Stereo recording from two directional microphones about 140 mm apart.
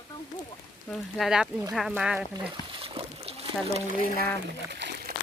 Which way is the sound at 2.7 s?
40° right (ahead or behind).